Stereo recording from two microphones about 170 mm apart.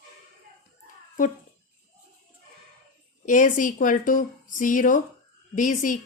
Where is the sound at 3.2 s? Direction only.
50° left (ahead or behind).